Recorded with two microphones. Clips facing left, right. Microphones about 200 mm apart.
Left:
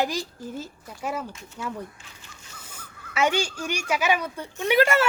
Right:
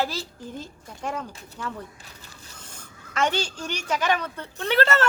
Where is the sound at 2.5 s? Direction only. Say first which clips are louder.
Left 3 dB; 10° left (ahead or behind).